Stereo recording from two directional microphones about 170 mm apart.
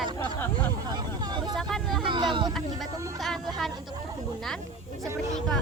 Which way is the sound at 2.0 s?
30° right (ahead or behind).